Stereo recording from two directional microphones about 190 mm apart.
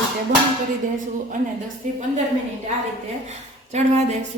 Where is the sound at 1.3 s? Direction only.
40° right (ahead or behind).